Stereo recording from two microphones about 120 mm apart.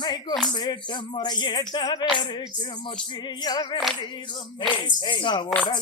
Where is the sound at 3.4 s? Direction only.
35° left (ahead or behind).